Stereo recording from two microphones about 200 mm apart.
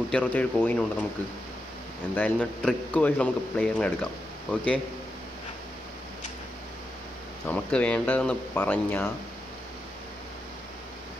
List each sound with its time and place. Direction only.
0.1 s speech: 5° left (ahead or behind)
2.1 s a man's voice: 10° left (ahead or behind)
7.4 s speech: 5° left (ahead or behind)